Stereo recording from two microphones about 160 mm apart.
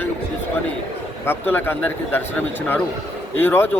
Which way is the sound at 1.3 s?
15° left (ahead or behind).